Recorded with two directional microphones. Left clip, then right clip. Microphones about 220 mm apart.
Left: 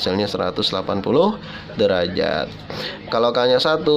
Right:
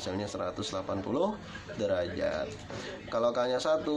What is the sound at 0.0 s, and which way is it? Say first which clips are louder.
Speech: left 14 dB; 45° left (ahead or behind).